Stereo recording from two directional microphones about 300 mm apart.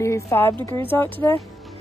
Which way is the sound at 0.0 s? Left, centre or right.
Centre.